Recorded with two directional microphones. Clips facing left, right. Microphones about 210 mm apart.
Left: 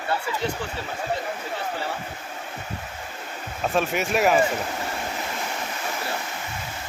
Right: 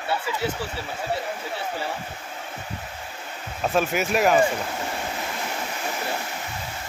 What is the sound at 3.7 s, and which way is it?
Speech, centre (ahead or behind).